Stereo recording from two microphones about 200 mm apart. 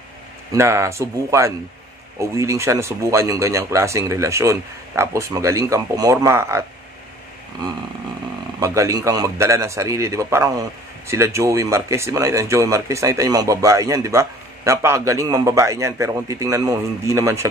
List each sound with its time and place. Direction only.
0.5 s speech: 15° right (ahead or behind)
8.5 s speech: 15° right (ahead or behind)